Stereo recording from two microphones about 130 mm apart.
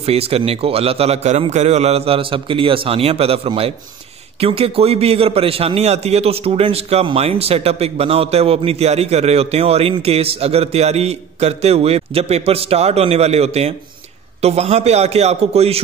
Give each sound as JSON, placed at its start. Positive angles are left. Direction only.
{"t": 0.0, "sound": "a man's voice", "side_deg": -50}